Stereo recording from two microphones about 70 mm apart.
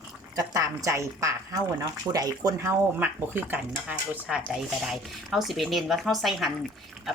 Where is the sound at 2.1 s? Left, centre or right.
Right.